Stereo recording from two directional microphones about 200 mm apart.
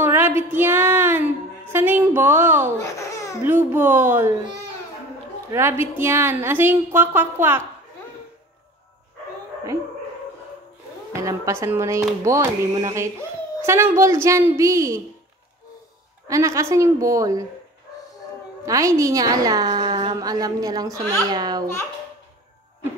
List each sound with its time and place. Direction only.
0.0 s speech: 10° right (ahead or behind)
2.8 s baby laughter: 15° left (ahead or behind)
3.4 s a woman's voice: 10° right (ahead or behind)
5.5 s a woman's voice: 10° right (ahead or behind)
11.2 s a woman's voice: 15° right (ahead or behind)
16.3 s a woman's voice: 15° right (ahead or behind)
18.7 s a woman's voice: 15° right (ahead or behind)